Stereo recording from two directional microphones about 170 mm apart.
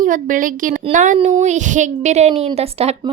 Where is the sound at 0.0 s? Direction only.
50° right (ahead or behind).